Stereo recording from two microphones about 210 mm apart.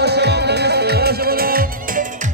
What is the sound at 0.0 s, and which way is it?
Music, 50° right (ahead or behind).